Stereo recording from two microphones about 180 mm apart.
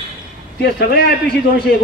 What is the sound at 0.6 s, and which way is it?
A man's voice, 60° left (ahead or behind).